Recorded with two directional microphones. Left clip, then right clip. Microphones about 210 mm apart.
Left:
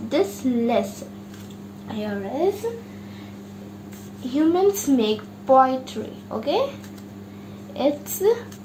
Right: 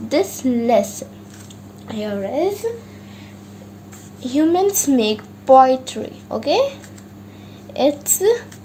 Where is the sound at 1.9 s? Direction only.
35° right (ahead or behind).